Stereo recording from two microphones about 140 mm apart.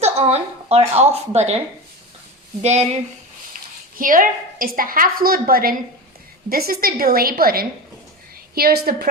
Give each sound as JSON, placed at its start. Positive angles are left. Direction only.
{"t": 0.0, "sound": "a woman's voice", "side_deg": -50}
{"t": 2.6, "sound": "speech", "side_deg": -50}
{"t": 3.5, "sound": "a woman's voice", "side_deg": -75}